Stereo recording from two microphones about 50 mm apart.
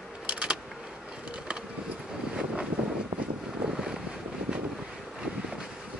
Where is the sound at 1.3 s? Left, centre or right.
Centre.